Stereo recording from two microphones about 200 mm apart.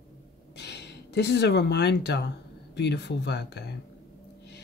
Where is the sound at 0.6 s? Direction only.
60° left (ahead or behind).